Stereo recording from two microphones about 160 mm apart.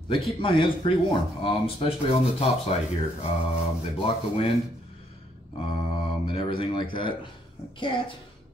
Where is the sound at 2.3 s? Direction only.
40° left (ahead or behind).